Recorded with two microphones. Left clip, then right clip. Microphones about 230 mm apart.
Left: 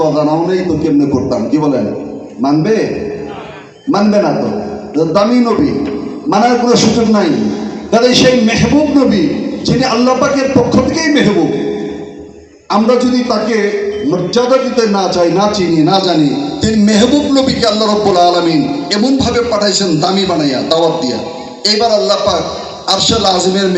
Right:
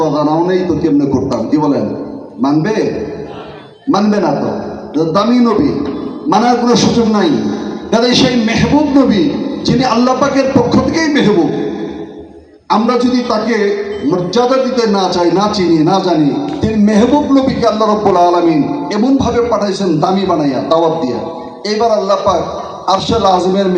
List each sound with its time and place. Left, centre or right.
0.0 s a man's voice: right
3.9 s a man's voice: right
12.7 s a man's voice: right